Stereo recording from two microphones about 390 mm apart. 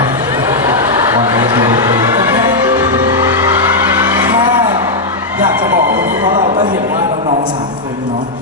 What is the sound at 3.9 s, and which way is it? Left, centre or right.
Vehicle, centre.